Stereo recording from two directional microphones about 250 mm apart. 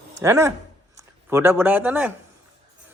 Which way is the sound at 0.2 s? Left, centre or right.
Centre.